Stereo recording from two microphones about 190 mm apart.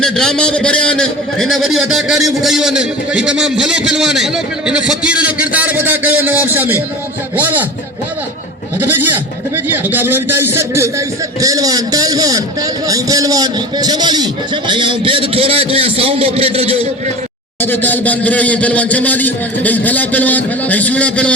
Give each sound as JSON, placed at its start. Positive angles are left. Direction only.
{"t": 0.0, "sound": "a man's voice", "side_deg": 5}
{"t": 7.3, "sound": "goat", "side_deg": -10}
{"t": 8.8, "sound": "goat", "side_deg": -10}
{"t": 9.7, "sound": "a man's voice", "side_deg": -10}
{"t": 17.6, "sound": "a man's voice", "side_deg": 10}